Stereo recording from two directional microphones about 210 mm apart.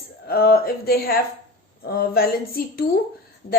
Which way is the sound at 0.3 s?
45° left (ahead or behind).